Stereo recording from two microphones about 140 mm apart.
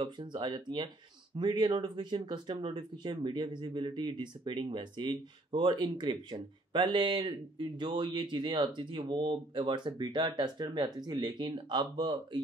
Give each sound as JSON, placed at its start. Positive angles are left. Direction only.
{"t": 0.0, "sound": "speech", "side_deg": -35}